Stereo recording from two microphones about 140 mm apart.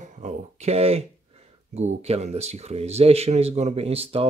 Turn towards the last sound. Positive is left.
turn(degrees=-45)  # may be behind; listen again after turning